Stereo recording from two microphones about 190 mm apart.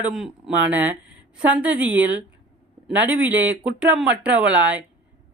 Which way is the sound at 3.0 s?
10° right (ahead or behind).